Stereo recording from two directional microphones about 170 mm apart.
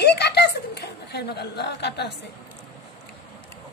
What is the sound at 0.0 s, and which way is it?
Chuckle, 75° left (ahead or behind).